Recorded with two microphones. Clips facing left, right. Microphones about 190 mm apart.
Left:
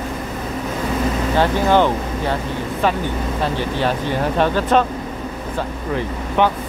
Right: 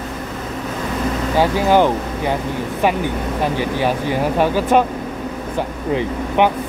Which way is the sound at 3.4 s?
10° right (ahead or behind).